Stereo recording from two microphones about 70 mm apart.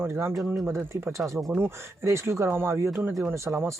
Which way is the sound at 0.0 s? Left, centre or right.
Right.